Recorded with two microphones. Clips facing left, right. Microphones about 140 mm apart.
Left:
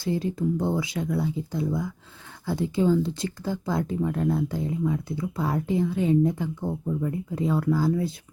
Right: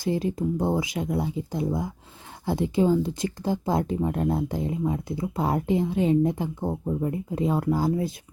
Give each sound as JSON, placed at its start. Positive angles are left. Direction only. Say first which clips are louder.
{"t": 0.0, "sound": "speech", "louder": "right 1 dB", "side_deg": -20}